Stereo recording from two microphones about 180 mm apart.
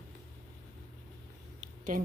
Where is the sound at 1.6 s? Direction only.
45° right (ahead or behind).